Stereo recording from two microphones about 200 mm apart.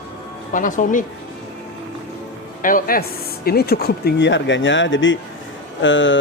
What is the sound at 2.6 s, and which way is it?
A man's voice, 45° left (ahead or behind).